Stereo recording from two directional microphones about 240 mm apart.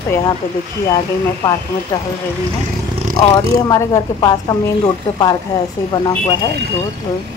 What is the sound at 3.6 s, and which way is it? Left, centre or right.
Speech, centre.